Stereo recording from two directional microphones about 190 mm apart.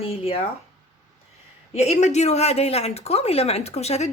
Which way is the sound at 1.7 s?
35° left (ahead or behind).